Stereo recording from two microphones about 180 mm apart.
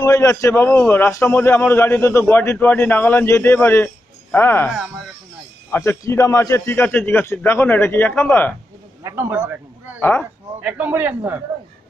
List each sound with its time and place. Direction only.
0.0 s a man's voice: 15° left (ahead or behind)
5.7 s a man's voice: 15° left (ahead or behind)
9.0 s a man's voice: 10° right (ahead or behind)